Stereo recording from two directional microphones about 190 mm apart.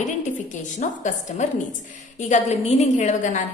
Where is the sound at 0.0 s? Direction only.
40° left (ahead or behind).